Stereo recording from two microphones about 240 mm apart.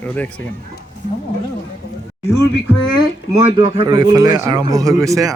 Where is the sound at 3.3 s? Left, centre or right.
Right.